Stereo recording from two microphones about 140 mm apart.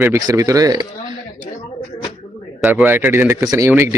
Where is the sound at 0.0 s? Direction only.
20° right (ahead or behind).